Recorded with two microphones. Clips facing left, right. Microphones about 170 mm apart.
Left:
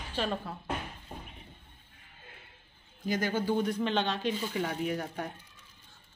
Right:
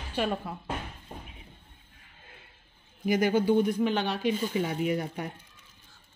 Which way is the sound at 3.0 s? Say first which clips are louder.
Right 6 dB; 15° right (ahead or behind).